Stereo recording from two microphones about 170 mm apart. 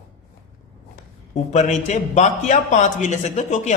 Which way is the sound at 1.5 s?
40° left (ahead or behind).